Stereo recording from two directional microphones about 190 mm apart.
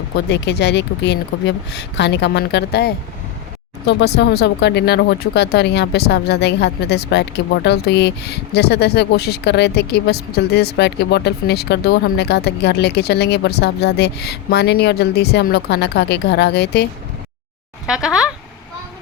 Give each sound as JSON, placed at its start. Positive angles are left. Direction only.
{"t": 0.3, "sound": "speech", "side_deg": 65}
{"t": 17.8, "sound": "speech", "side_deg": -5}